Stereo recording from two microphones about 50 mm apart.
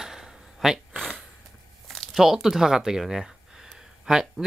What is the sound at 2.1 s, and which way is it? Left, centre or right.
Speech, centre.